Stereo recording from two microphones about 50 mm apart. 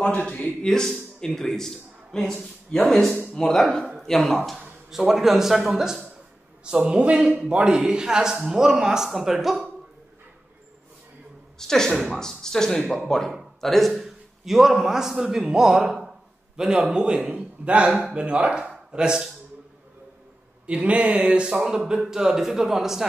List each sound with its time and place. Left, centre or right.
0.0 s a man's voice: left
0.7 s a man's voice: centre
4.9 s speech: centre
6.9 s speech: centre
11.5 s speech: centre
12.8 s a man's voice: centre
20.6 s a man's voice: right; by 23.0 s centre